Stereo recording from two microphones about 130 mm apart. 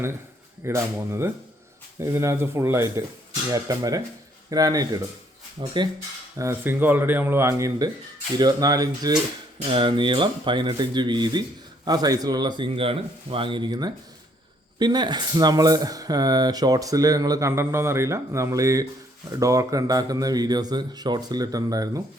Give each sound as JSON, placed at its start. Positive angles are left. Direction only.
{"t": 0.6, "sound": "speech", "side_deg": -20}
{"t": 6.3, "sound": "speech", "side_deg": -20}
{"t": 9.6, "sound": "speech", "side_deg": -40}